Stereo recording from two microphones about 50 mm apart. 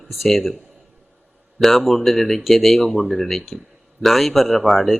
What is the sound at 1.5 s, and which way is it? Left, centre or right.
Speech, centre.